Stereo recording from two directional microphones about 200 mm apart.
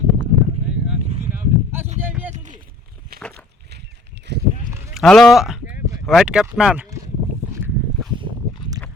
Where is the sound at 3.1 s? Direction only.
50° right (ahead or behind).